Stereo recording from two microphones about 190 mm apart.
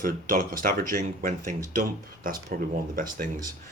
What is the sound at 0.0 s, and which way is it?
Speech, 45° right (ahead or behind).